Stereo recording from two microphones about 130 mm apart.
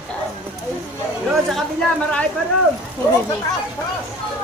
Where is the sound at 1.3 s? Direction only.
Centre (ahead or behind).